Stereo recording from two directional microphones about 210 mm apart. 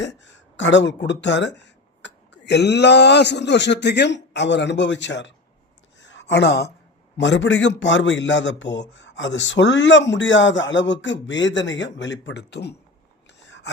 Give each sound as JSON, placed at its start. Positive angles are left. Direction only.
{"t": 0.0, "sound": "speech", "side_deg": 60}
{"t": 6.0, "sound": "a sound", "side_deg": 60}
{"t": 7.2, "sound": "a man's voice", "side_deg": 60}